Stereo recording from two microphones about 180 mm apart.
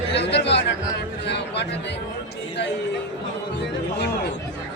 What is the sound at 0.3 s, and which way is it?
Speech, 70° left (ahead or behind).